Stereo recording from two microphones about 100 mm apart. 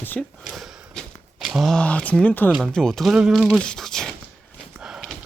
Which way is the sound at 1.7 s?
15° left (ahead or behind).